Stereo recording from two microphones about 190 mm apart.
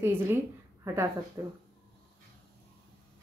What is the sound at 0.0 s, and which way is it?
Speech, 10° right (ahead or behind).